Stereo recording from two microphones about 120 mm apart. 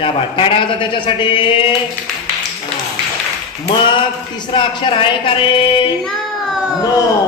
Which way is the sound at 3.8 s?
40° left (ahead or behind).